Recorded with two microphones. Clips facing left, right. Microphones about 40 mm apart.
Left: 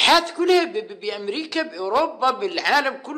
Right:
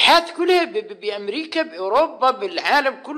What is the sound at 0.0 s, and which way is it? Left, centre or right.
A man's voice, centre.